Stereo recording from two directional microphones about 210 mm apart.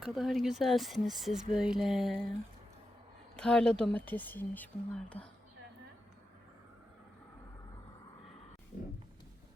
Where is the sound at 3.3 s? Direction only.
5° left (ahead or behind).